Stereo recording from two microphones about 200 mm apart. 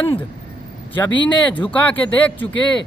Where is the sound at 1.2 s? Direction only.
5° left (ahead or behind).